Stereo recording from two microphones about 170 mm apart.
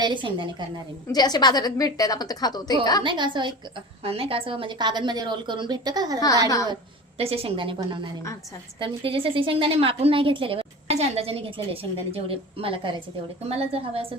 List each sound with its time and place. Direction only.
0.0 s a woman's voice: 30° right (ahead or behind)
1.0 s a woman's voice: 25° left (ahead or behind)
3.0 s a woman's voice: 30° right (ahead or behind)
7.2 s a woman's voice: 35° right (ahead or behind)